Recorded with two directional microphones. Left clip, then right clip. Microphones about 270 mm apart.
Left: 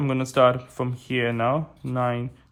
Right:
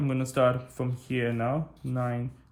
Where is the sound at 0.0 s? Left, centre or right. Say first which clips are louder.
Left 6 dB; centre.